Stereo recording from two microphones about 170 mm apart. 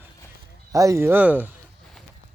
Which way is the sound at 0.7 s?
20° right (ahead or behind).